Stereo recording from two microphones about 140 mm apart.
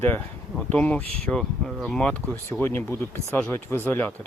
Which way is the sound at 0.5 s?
10° left (ahead or behind).